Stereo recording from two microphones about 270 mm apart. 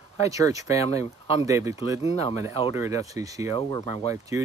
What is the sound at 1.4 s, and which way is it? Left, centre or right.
Speech, centre.